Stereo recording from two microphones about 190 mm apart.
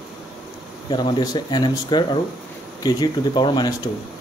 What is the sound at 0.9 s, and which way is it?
Speech, 25° left (ahead or behind).